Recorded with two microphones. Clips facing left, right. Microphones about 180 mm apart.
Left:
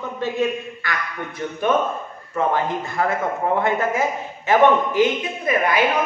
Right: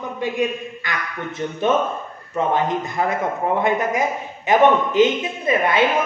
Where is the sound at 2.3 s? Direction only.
20° right (ahead or behind).